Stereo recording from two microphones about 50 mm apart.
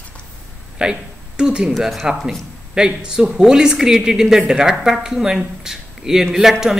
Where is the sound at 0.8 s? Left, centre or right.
Centre.